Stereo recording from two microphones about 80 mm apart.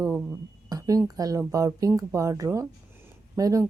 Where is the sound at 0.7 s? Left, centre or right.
Right.